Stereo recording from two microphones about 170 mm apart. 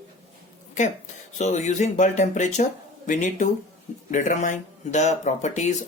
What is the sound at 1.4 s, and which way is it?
Speech, 45° left (ahead or behind).